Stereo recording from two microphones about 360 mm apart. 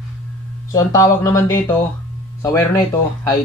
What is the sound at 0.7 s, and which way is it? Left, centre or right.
Speech, centre.